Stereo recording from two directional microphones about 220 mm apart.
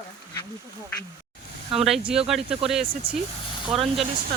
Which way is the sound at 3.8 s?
25° right (ahead or behind).